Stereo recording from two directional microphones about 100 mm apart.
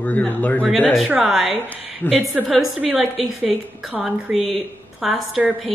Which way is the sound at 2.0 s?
15° left (ahead or behind).